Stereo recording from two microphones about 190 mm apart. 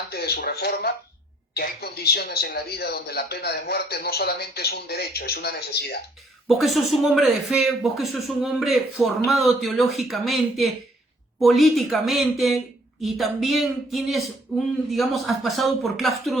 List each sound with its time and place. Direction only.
0.1 s speech: 55° left (ahead or behind)
6.5 s speech: centre (ahead or behind)